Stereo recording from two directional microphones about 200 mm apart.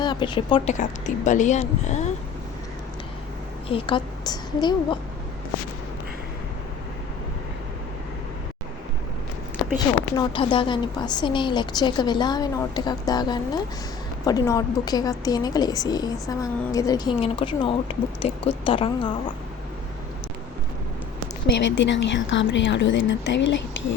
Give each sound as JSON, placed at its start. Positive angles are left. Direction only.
{"t": 0.0, "sound": "speech", "side_deg": 25}
{"t": 3.7, "sound": "a woman's voice", "side_deg": 25}
{"t": 9.7, "sound": "a woman's voice", "side_deg": 20}
{"t": 21.4, "sound": "a woman's voice", "side_deg": 60}